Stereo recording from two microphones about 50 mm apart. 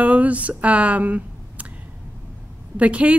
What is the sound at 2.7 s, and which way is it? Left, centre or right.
Speech, right.